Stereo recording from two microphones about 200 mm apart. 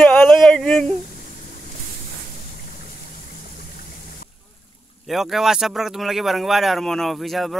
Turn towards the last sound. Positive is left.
turn(degrees=0)  # may be behind; listen again after turning